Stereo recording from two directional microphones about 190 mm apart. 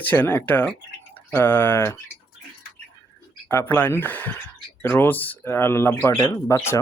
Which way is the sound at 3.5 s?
10° left (ahead or behind).